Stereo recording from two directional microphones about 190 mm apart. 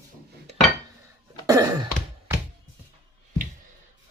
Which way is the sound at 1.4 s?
20° right (ahead or behind).